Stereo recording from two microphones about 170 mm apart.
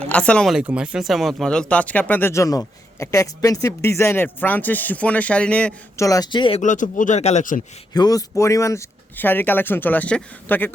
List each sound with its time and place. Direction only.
0.1 s speech: 5° left (ahead or behind)
0.6 s speech: 5° right (ahead or behind)
6.0 s speech: 20° left (ahead or behind)
6.6 s speech: 50° left (ahead or behind)
7.9 s speech: 20° left (ahead or behind)